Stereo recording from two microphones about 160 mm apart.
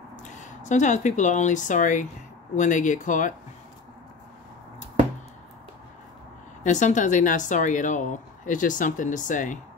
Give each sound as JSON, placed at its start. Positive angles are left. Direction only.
{"t": 0.1, "sound": "speech", "side_deg": 50}
{"t": 6.6, "sound": "speech", "side_deg": 50}